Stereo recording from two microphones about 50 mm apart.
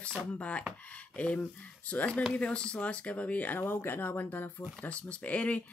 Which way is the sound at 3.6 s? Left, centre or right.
Left.